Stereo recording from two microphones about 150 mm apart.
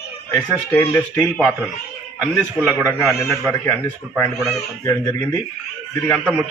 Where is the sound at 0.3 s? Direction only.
10° left (ahead or behind).